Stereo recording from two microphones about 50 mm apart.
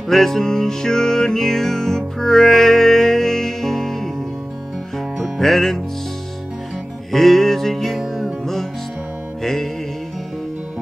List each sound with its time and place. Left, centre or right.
0.1 s music: centre
7.1 s music: centre
9.4 s music: centre